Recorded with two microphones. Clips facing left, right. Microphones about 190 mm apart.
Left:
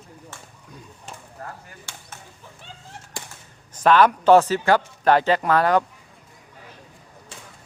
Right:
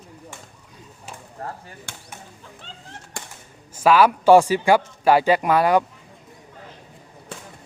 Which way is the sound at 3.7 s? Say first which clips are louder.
Right 1 dB; 5° right (ahead or behind).